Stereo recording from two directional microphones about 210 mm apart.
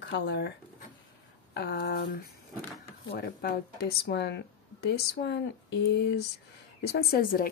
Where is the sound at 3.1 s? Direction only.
50° left (ahead or behind).